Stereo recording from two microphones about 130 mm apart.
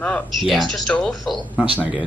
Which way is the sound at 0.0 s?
5° left (ahead or behind).